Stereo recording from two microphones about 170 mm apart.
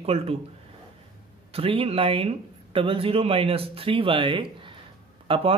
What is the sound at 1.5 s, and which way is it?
Speech, 35° right (ahead or behind).